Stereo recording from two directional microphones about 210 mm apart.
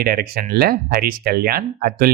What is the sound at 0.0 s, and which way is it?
Speech, 50° right (ahead or behind).